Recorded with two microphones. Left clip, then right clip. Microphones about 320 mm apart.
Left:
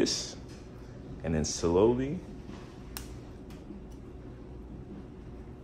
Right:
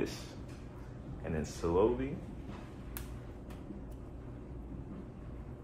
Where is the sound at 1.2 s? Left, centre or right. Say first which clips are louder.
Left 6 dB; left.